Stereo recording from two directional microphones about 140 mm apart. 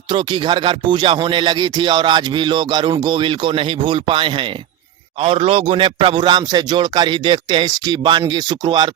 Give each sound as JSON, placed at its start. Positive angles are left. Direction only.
{"t": 0.1, "sound": "speech", "side_deg": -35}